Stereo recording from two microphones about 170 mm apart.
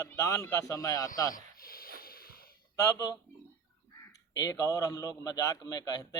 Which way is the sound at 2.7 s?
20° left (ahead or behind).